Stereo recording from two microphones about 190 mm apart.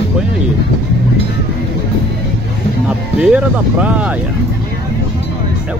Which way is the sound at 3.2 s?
5° right (ahead or behind).